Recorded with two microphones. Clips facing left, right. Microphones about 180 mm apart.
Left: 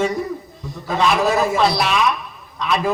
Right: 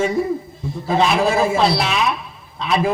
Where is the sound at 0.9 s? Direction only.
30° right (ahead or behind).